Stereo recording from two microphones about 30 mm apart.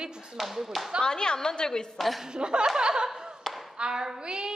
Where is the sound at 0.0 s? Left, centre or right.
Right.